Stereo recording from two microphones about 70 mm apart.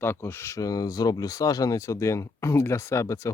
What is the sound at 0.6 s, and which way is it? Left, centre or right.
Speech, left.